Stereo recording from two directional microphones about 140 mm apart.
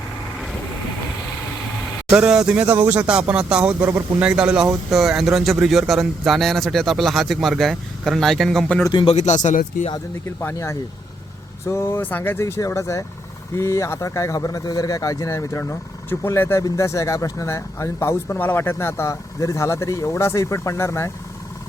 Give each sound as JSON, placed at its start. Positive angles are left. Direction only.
{"t": 2.0, "sound": "speech", "side_deg": -5}
{"t": 8.9, "sound": "speech", "side_deg": 35}
{"t": 9.1, "sound": "speech", "side_deg": 55}
{"t": 9.9, "sound": "speech", "side_deg": 20}